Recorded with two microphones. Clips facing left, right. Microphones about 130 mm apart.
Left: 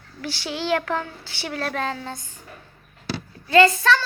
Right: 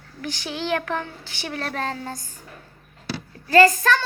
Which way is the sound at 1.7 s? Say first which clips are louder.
Even; 35° right (ahead or behind).